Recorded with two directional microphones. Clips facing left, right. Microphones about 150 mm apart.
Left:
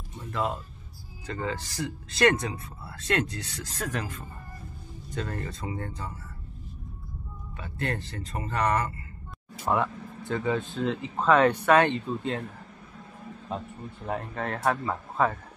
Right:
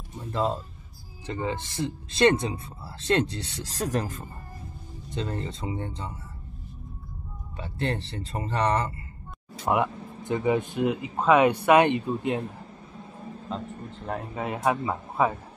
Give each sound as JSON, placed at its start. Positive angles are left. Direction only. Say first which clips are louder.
{"t": 0.2, "sound": "speech", "louder": "right 3 dB", "side_deg": -30}
{"t": 5.1, "sound": "speech", "louder": "right 2 dB", "side_deg": -25}
{"t": 7.5, "sound": "speech", "louder": "right 3 dB", "side_deg": -30}
{"t": 9.7, "sound": "speech", "louder": "right 2 dB", "side_deg": -15}
{"t": 13.9, "sound": "speech", "louder": "even", "side_deg": 0}